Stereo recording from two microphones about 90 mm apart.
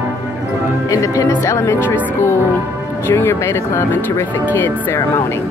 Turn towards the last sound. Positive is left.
turn(degrees=30)  # may be behind; listen again after turning